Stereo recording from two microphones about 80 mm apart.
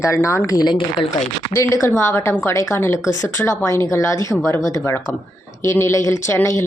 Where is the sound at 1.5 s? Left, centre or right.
Left.